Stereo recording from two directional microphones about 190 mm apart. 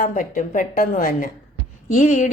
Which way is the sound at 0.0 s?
45° left (ahead or behind).